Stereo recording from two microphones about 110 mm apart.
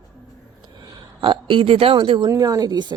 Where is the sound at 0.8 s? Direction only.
45° right (ahead or behind).